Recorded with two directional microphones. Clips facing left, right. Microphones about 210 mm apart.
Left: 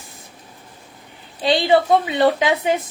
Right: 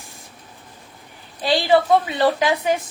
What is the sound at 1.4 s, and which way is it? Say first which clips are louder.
A woman's voice: left 1 dB; 20° left (ahead or behind).